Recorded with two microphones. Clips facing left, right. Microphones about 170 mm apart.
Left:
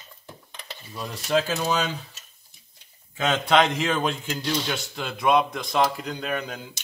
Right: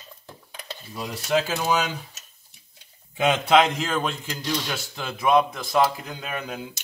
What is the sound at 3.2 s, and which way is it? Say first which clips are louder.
A man's voice: right 2 dB; 10° right (ahead or behind).